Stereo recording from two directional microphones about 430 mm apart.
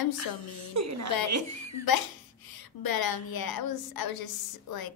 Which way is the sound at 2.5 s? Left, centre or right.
Left.